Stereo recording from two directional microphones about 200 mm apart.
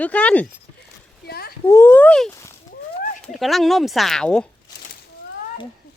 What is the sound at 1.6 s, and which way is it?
A child's voice, 15° left (ahead or behind).